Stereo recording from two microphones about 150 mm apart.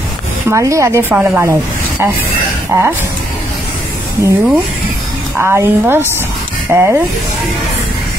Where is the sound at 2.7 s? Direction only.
15° right (ahead or behind).